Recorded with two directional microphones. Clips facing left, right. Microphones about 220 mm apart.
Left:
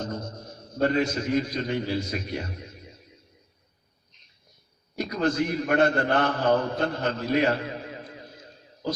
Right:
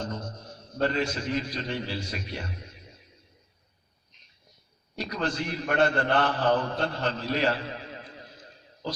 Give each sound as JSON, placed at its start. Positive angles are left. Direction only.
{"t": 0.0, "sound": "a man's voice", "side_deg": 40}
{"t": 4.9, "sound": "a man's voice", "side_deg": 45}